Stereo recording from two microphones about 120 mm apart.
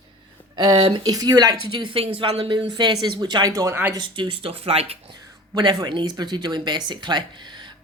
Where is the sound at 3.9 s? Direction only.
40° right (ahead or behind).